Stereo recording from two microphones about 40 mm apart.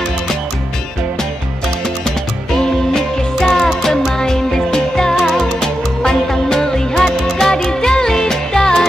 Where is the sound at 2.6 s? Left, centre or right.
Centre.